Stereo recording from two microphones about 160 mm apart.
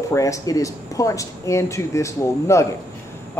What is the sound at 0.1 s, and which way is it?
A man's voice, 20° left (ahead or behind).